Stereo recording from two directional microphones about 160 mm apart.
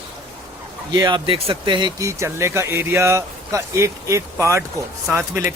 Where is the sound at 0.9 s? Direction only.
30° right (ahead or behind).